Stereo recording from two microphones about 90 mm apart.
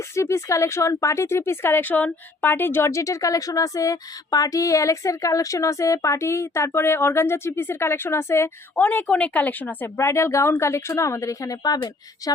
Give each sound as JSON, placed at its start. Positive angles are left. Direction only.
{"t": 0.2, "sound": "speech", "side_deg": 30}